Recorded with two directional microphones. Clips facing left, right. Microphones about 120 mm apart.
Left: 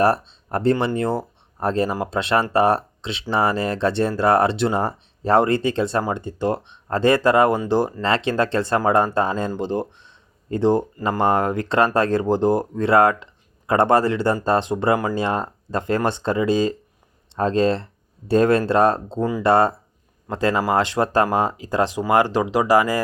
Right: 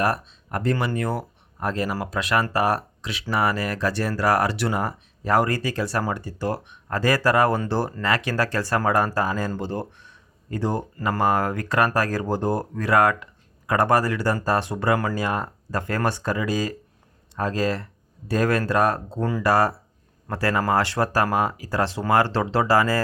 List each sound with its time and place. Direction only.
0.0 s speech: 30° left (ahead or behind)